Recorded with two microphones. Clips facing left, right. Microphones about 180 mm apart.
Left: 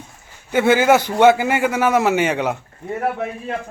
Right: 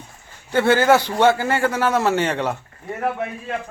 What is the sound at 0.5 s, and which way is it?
A man's voice, 10° left (ahead or behind).